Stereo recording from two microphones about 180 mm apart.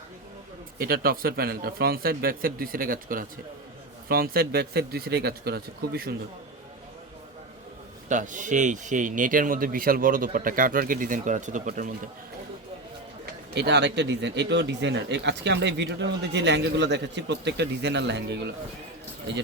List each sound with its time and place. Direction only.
0.8 s speech: 55° right (ahead or behind)
8.1 s speech: 45° right (ahead or behind)
13.5 s speech: 70° right (ahead or behind)